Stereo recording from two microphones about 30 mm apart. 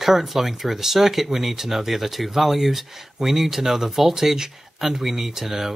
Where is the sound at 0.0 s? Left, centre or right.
Centre.